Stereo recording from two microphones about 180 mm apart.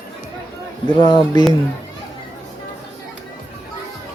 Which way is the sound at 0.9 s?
25° left (ahead or behind).